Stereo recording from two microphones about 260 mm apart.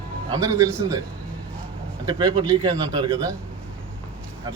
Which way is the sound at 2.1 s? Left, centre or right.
Centre.